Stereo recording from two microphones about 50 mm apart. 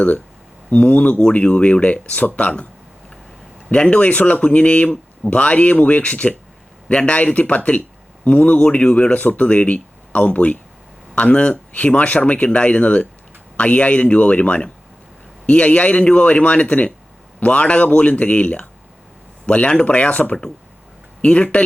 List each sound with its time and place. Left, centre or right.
0.7 s speech: left
3.7 s speech: left
9.1 s speech: left